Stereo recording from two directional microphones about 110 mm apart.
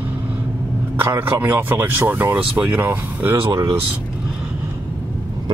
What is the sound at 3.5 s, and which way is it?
Speech, 35° right (ahead or behind).